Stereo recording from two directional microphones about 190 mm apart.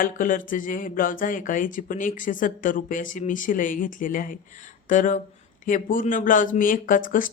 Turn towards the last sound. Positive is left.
turn(degrees=45)  # may be behind; listen again after turning